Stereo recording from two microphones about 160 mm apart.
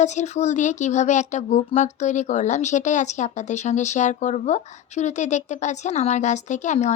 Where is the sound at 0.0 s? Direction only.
45° left (ahead or behind).